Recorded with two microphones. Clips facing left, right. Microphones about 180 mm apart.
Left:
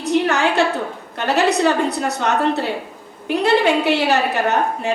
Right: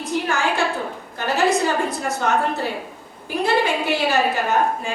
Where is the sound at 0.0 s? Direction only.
70° left (ahead or behind).